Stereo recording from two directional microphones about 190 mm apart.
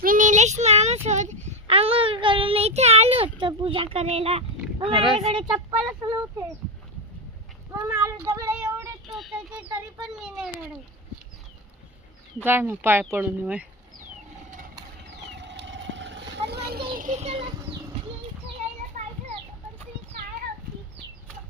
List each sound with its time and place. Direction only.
0.0 s child singing: 45° right (ahead or behind)
1.0 s a child's voice: 40° right (ahead or behind); by 6.2 s 20° right (ahead or behind)
7.9 s a child's voice: 15° right (ahead or behind)
12.5 s speech: 10° right (ahead or behind)
15.4 s vehicle: 70° right (ahead or behind); by 17.4 s 35° right (ahead or behind)